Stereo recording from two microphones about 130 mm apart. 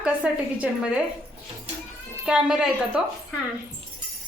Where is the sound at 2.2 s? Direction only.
5° right (ahead or behind).